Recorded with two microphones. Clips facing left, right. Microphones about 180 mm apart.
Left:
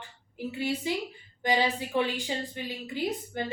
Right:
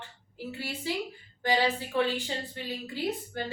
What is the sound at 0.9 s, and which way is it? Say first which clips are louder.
A woman's voice: left 1 dB; 15° left (ahead or behind).